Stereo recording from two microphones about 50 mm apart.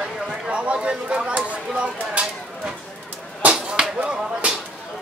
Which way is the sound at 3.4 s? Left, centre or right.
Right.